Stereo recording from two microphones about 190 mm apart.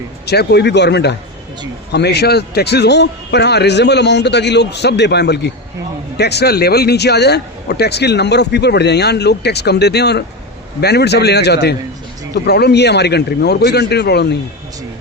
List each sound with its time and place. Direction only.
0.3 s a man's voice: 60° left (ahead or behind)